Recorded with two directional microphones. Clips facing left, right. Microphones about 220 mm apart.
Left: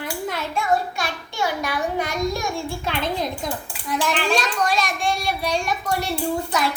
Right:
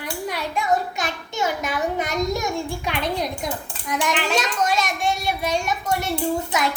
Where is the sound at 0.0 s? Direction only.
15° right (ahead or behind).